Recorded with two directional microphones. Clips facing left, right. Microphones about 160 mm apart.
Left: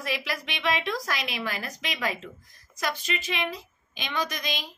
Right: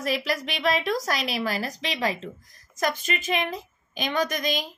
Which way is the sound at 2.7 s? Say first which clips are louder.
Right 4 dB; 45° right (ahead or behind).